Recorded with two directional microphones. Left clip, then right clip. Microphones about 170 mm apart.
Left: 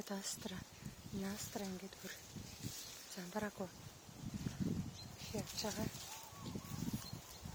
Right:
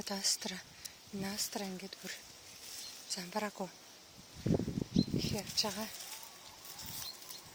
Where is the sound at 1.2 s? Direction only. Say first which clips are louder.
Right 6 dB; 35° right (ahead or behind).